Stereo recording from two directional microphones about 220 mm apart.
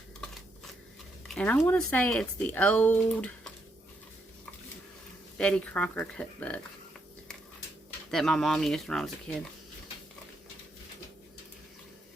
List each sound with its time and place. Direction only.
1.3 s speech: 5° left (ahead or behind)
5.4 s speech: 5° left (ahead or behind)
8.1 s speech: centre (ahead or behind)